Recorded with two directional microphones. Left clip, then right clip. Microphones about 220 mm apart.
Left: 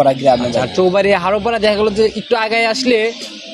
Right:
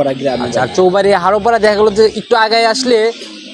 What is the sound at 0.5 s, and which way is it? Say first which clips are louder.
A man's voice: right 2 dB; 5° right (ahead or behind).